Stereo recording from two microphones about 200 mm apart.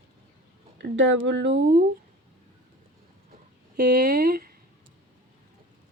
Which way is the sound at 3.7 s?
50° right (ahead or behind).